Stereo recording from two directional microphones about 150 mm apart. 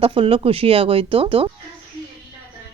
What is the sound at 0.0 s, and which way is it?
Speech, 35° right (ahead or behind).